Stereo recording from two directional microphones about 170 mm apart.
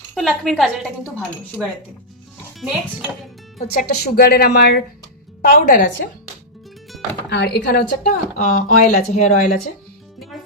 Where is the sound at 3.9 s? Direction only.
65° left (ahead or behind).